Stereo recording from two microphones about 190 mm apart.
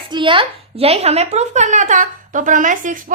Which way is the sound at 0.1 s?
25° right (ahead or behind).